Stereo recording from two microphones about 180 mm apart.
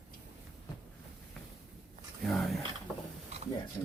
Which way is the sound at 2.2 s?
Centre (ahead or behind).